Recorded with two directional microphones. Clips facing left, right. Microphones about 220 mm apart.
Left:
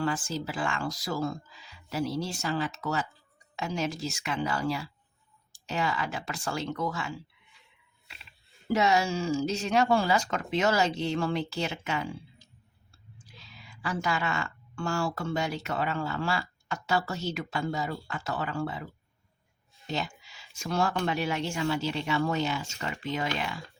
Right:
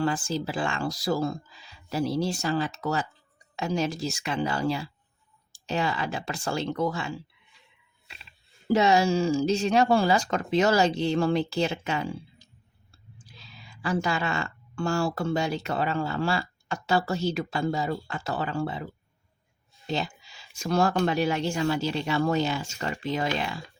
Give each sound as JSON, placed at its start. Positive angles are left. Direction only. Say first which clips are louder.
{"t": 0.0, "sound": "speech", "louder": "right 3 dB", "side_deg": -30}
{"t": 8.7, "sound": "speech", "louder": "right 4 dB", "side_deg": -30}
{"t": 13.8, "sound": "speech", "louder": "right 3 dB", "side_deg": -30}
{"t": 19.9, "sound": "speech", "louder": "right 3 dB", "side_deg": -30}